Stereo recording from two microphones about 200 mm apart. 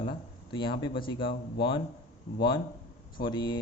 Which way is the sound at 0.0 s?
25° left (ahead or behind).